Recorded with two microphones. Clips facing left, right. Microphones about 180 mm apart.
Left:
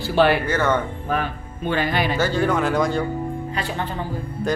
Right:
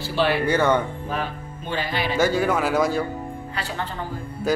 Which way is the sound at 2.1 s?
10° right (ahead or behind).